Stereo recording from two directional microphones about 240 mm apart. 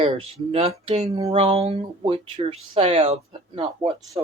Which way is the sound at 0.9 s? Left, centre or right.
Right.